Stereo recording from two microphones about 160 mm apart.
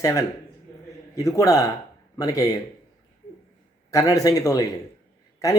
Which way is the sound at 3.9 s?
20° left (ahead or behind).